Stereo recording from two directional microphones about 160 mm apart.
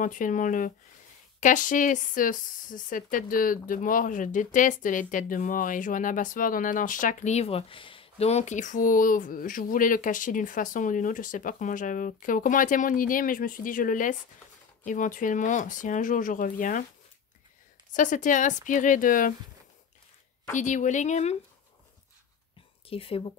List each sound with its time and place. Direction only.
0.0 s speech: 55° left (ahead or behind)
17.9 s a woman's voice: 55° left (ahead or behind)
20.5 s a woman's voice: 50° left (ahead or behind)
22.8 s speech: 35° left (ahead or behind)